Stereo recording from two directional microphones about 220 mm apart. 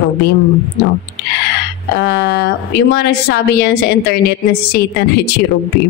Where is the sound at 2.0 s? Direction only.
50° left (ahead or behind).